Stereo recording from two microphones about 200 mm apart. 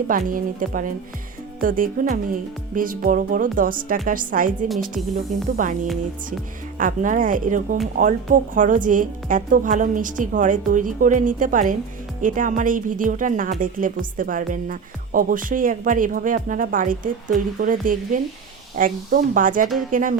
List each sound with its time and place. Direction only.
0.1 s a woman's voice: 45° right (ahead or behind)
5.5 s a woman's voice: 40° right (ahead or behind)